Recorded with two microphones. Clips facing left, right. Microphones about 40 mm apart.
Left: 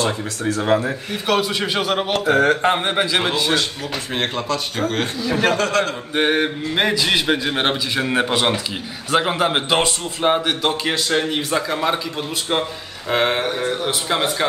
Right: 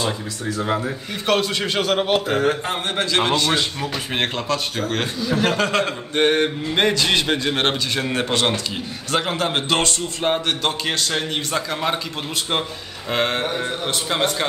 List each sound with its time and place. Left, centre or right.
0.0 s speech: left
1.2 s a man's voice: centre
2.3 s speech: left
2.6 s a man's voice: left; by 3.5 s centre
4.2 s a man's voice: centre
5.6 s speech: centre
6.1 s a man's voice: centre
13.1 s a man's voice: centre